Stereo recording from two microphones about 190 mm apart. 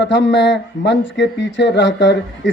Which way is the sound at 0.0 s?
70° left (ahead or behind).